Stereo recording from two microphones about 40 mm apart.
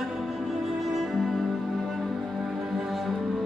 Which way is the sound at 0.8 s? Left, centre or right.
Centre.